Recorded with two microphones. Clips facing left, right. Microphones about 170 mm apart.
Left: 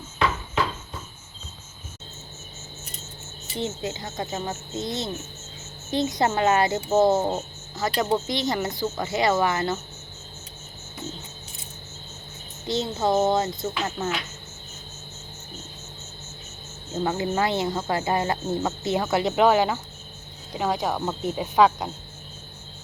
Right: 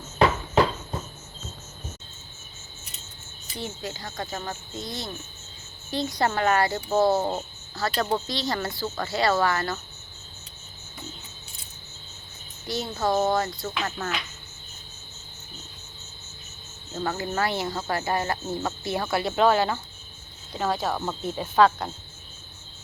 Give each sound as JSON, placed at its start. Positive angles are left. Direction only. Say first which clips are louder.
{"t": 3.5, "sound": "speech", "louder": "left 5 dB", "side_deg": 25}
{"t": 12.6, "sound": "speech", "louder": "left 3 dB", "side_deg": 20}
{"t": 14.0, "sound": "cricket", "louder": "left 4 dB", "side_deg": 5}
{"t": 16.9, "sound": "speech", "louder": "left 4 dB", "side_deg": 20}